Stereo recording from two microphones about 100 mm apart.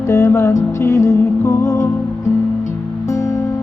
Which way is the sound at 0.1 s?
25° left (ahead or behind).